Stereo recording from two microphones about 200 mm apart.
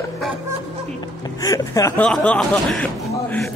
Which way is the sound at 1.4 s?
15° left (ahead or behind).